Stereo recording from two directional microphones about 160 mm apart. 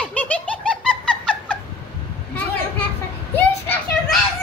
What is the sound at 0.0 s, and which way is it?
Laughter, 10° left (ahead or behind).